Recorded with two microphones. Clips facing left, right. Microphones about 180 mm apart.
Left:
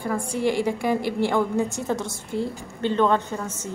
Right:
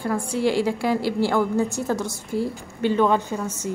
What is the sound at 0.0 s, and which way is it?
A woman's voice, 10° right (ahead or behind).